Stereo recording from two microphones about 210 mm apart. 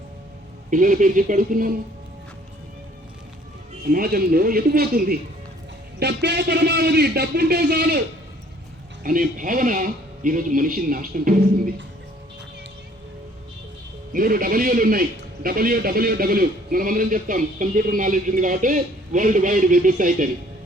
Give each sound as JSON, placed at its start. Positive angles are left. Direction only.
{"t": 0.7, "sound": "a man's voice", "side_deg": -40}
{"t": 3.8, "sound": "a man's voice", "side_deg": -45}
{"t": 9.0, "sound": "a man's voice", "side_deg": -40}
{"t": 14.1, "sound": "a man's voice", "side_deg": -40}